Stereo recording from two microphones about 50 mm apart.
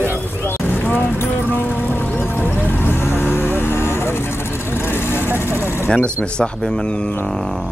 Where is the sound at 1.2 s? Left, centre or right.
Left.